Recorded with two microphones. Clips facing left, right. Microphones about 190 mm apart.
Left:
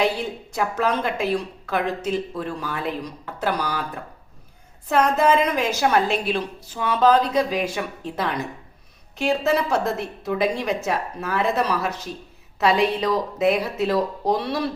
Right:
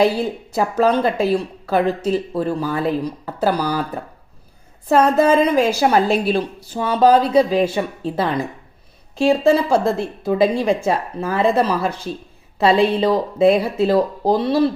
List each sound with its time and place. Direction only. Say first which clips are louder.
0.0 s speech: right 6 dB; 35° right (ahead or behind)